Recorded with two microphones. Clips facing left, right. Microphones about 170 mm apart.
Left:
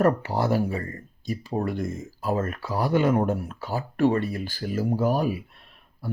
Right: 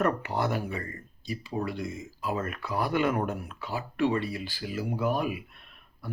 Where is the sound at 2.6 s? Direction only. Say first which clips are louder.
Left 2 dB; 30° left (ahead or behind).